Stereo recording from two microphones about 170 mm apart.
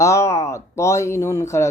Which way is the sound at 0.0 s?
15° left (ahead or behind).